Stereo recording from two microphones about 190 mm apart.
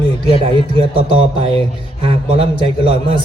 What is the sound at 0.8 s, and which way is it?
A man's voice, 30° right (ahead or behind).